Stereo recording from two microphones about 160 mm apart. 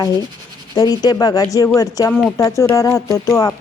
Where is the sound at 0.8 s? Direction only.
25° left (ahead or behind).